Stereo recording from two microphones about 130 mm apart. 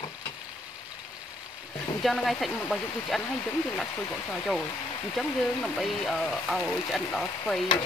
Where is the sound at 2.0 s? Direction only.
Centre (ahead or behind).